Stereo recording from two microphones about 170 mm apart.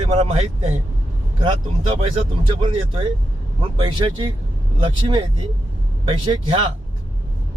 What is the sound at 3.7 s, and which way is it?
Speech, 30° right (ahead or behind).